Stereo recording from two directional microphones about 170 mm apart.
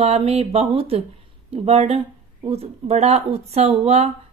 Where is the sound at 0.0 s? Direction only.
35° right (ahead or behind).